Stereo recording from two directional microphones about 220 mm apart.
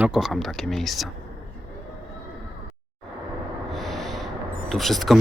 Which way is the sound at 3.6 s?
Centre (ahead or behind).